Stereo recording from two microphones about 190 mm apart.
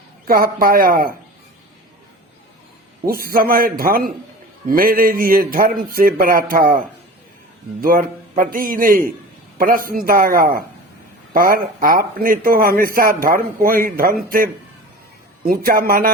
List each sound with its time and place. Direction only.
0.3 s speech: 50° right (ahead or behind)
3.1 s speech: 50° right (ahead or behind)